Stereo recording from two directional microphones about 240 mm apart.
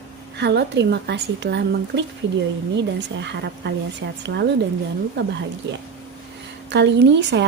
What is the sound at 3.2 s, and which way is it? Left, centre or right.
Speech, right.